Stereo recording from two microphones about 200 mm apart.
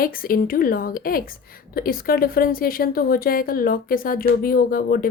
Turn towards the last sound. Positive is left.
turn(degrees=45)  # may be behind; listen again after turning